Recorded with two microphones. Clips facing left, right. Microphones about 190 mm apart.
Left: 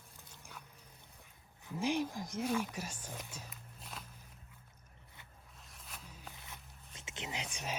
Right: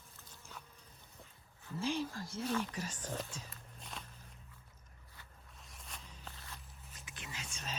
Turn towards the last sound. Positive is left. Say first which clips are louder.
# left 6 dB
turn(degrees=20)  # may be behind; listen again after turning